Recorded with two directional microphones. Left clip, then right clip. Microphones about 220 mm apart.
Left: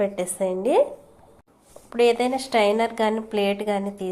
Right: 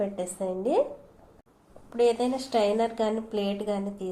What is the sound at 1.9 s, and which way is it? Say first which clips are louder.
A woman's voice: left 5 dB; 25° left (ahead or behind).